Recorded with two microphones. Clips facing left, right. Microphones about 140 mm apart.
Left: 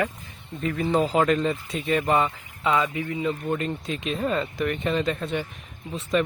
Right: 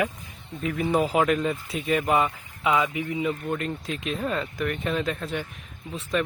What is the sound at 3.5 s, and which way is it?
Speech, centre (ahead or behind).